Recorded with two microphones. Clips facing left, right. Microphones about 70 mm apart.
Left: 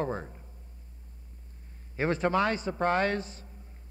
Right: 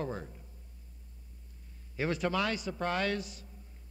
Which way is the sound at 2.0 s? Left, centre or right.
Left.